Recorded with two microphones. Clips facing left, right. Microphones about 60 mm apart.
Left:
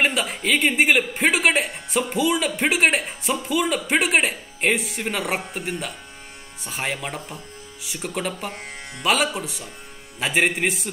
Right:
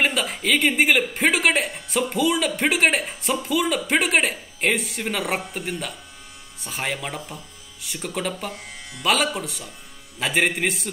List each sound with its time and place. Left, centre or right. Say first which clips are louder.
0.0 s speech: left 1 dB; centre
8.5 s speech: left 2 dB; left
9.0 s speech: even; centre